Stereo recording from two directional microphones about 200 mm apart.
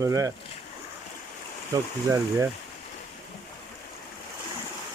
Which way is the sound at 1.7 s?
20° right (ahead or behind).